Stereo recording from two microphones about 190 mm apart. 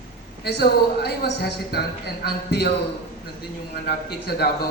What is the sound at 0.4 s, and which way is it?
A man's voice, 60° left (ahead or behind).